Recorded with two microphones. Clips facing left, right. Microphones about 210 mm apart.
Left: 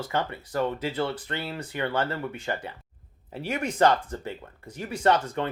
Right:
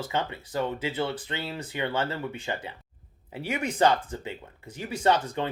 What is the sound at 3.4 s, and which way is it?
Speech, 10° right (ahead or behind).